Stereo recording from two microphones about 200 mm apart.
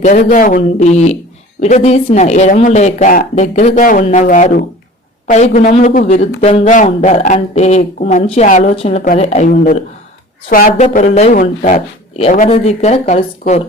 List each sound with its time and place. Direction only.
0.0 s speech: 40° left (ahead or behind)